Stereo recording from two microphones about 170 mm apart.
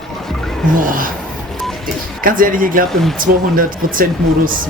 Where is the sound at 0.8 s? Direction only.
55° right (ahead or behind).